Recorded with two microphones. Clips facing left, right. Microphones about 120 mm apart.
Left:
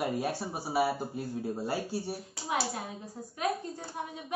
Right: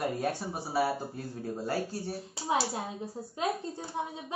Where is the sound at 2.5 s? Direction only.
25° right (ahead or behind).